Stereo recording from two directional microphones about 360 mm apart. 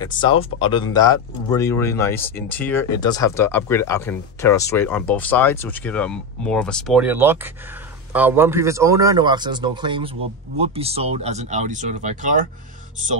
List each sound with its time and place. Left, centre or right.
0.0 s speech: centre; by 12.4 s right